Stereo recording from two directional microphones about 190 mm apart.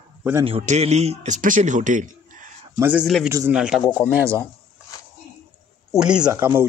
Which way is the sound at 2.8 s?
5° right (ahead or behind).